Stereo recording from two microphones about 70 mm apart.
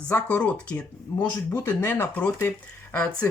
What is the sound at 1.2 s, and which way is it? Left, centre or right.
Speech, left.